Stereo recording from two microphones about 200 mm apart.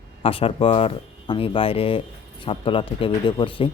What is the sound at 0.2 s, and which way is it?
Speech, 30° left (ahead or behind).